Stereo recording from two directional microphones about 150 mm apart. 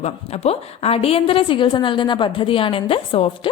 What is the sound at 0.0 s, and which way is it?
A woman's voice, 45° left (ahead or behind).